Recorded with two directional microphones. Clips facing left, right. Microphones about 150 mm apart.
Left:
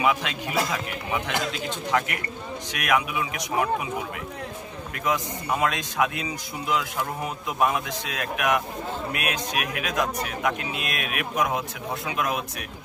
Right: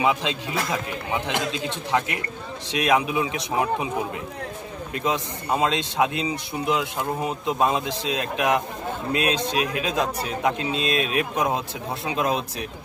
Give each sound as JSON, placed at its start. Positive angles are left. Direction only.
{"t": 0.0, "sound": "a man's voice", "side_deg": -25}
{"t": 4.9, "sound": "a man's voice", "side_deg": -25}